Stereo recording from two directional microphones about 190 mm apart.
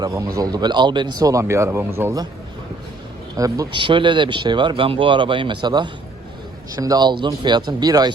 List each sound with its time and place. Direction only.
0.0 s speech: 20° right (ahead or behind)
3.3 s speech: 20° right (ahead or behind)